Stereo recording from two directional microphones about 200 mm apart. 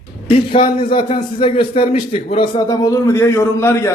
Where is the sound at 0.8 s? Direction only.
25° left (ahead or behind).